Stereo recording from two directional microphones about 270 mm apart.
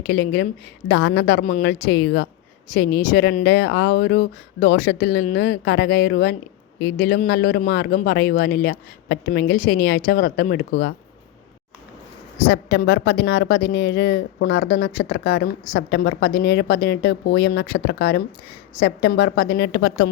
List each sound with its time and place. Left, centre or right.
0.1 s speech: left
12.5 s speech: left